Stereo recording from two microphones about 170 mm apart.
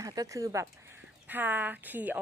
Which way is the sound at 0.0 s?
20° right (ahead or behind).